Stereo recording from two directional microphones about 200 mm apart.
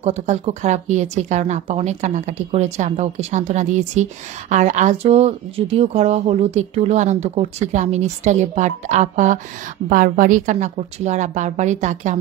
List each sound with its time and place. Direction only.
0.0 s speech: 30° right (ahead or behind)